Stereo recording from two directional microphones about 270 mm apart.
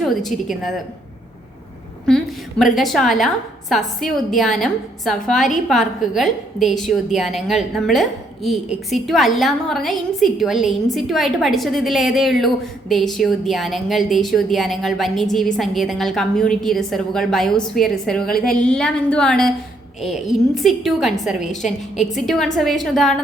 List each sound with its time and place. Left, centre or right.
0.0 s a woman's voice: centre
2.0 s a woman's voice: centre
21.4 s a woman's voice: left
22.1 s a woman's voice: centre